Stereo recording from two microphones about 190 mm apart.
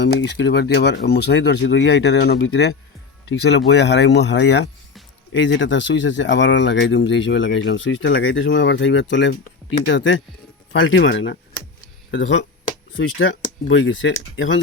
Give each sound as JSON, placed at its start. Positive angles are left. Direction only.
{"t": 0.0, "sound": "speech", "side_deg": 65}
{"t": 13.0, "sound": "speech", "side_deg": 85}